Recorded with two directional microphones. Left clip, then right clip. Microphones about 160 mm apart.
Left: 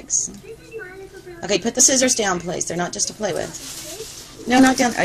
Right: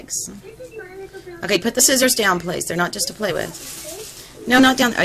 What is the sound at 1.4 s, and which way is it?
A woman's voice, 15° right (ahead or behind).